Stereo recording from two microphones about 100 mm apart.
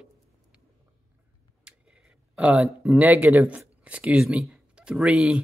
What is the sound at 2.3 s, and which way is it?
Speech, 10° right (ahead or behind).